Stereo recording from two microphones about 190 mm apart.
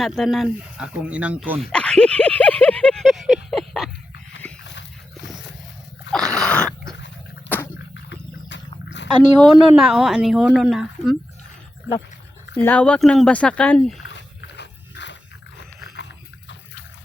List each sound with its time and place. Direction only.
0.0 s a sound: centre (ahead or behind)
4.6 s dog: 70° left (ahead or behind)
6.1 s dog: 5° left (ahead or behind)
8.1 s roaring cats: 70° left (ahead or behind)
9.4 s a woman's voice: centre (ahead or behind)
12.6 s a woman's voice: 5° left (ahead or behind)
14.1 s a sound: 65° left (ahead or behind)
16.0 s pig: 70° left (ahead or behind)